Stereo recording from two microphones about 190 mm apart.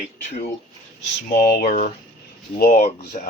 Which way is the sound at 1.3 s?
50° left (ahead or behind).